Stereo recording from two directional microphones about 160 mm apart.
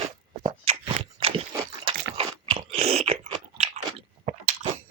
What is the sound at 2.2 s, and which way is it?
Crunch, 35° right (ahead or behind).